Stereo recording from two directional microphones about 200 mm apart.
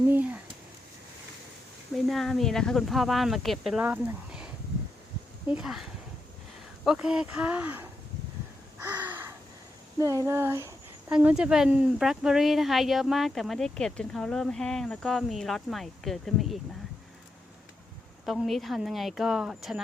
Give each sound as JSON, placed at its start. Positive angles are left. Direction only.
{"t": 0.1, "sound": "speech", "side_deg": -5}
{"t": 1.9, "sound": "a woman's voice", "side_deg": 0}
{"t": 5.5, "sound": "a woman's voice", "side_deg": -5}
{"t": 6.8, "sound": "a woman's voice", "side_deg": -5}
{"t": 8.8, "sound": "crow", "side_deg": -10}
{"t": 10.0, "sound": "a woman's voice", "side_deg": -15}
{"t": 18.3, "sound": "a woman's voice", "side_deg": 0}